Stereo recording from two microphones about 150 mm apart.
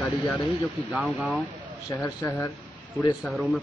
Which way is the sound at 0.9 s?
Centre (ahead or behind).